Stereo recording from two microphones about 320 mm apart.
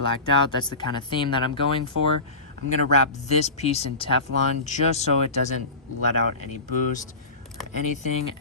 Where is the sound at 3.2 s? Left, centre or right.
Centre.